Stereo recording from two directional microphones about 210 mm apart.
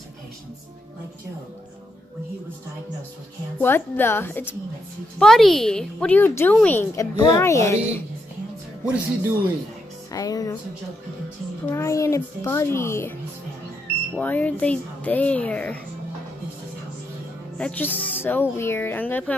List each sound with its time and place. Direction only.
3.5 s a woman's voice: 10° left (ahead or behind)
8.8 s speech: 5° right (ahead or behind)
10.1 s a woman's voice: 15° left (ahead or behind)
11.7 s a woman's voice: 15° left (ahead or behind)
14.1 s a woman's voice: 5° left (ahead or behind)
17.6 s a woman's voice: 5° left (ahead or behind)